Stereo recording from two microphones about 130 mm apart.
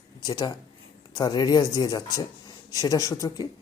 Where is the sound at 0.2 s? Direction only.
30° left (ahead or behind).